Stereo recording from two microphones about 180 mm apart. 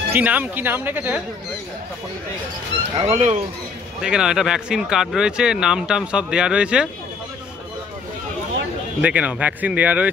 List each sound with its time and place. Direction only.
0.1 s speech: 10° right (ahead or behind)
3.0 s speech: 35° right (ahead or behind)
4.0 s speech: 5° right (ahead or behind)
9.0 s speech: 10° right (ahead or behind)